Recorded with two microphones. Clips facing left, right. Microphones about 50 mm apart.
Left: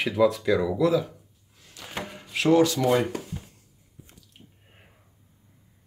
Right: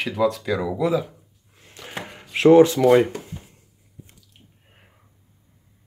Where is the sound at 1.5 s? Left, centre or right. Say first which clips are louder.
Right 3 dB; right.